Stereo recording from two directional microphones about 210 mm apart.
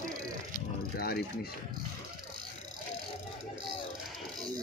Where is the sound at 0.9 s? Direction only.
45° left (ahead or behind).